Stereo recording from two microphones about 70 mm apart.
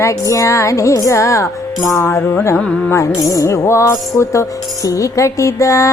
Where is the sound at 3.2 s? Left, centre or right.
Left.